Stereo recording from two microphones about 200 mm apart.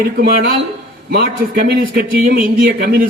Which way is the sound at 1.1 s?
50° right (ahead or behind).